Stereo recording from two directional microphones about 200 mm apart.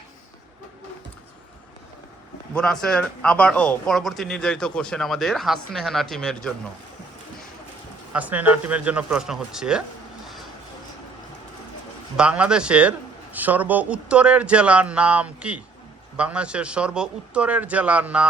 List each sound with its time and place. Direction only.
2.5 s speech: 5° left (ahead or behind)
8.1 s speech: 5° right (ahead or behind)
12.1 s speech: 5° right (ahead or behind)